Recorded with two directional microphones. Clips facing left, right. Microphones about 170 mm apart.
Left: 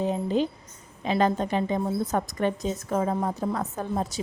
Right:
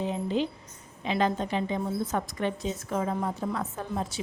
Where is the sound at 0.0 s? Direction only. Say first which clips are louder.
Left 3 dB; 40° left (ahead or behind).